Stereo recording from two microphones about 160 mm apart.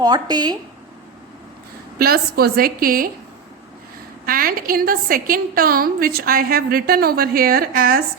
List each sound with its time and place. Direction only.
0.0 s speech: 25° right (ahead or behind)
2.0 s a woman's voice: 70° right (ahead or behind)
4.3 s a woman's voice: 65° right (ahead or behind)